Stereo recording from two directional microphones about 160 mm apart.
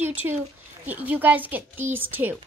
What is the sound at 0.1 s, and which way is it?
Speech, 10° right (ahead or behind).